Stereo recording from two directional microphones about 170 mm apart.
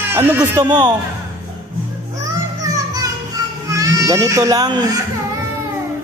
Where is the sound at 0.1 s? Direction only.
15° right (ahead or behind).